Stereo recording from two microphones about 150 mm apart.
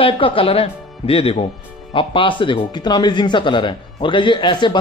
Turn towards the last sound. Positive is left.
turn(degrees=30)  # may be behind; listen again after turning